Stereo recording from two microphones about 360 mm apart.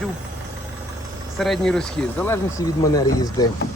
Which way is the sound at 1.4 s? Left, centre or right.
Centre.